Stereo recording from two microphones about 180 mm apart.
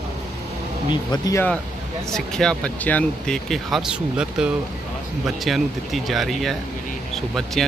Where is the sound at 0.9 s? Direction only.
20° left (ahead or behind).